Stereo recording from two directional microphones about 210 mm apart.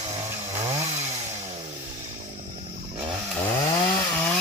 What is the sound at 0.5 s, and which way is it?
Chainsaw, 30° right (ahead or behind).